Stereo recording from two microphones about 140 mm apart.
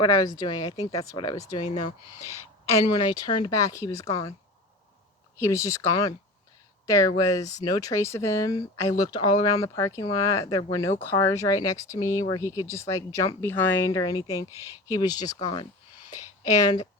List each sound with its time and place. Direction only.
0.2 s speech: 30° left (ahead or behind)
1.6 s speech: 55° left (ahead or behind)
2.7 s speech: 30° left (ahead or behind)
5.4 s speech: 20° left (ahead or behind)
13.9 s speech: 30° left (ahead or behind)
14.5 s speech: 20° right (ahead or behind)
14.9 s speech: 30° left (ahead or behind)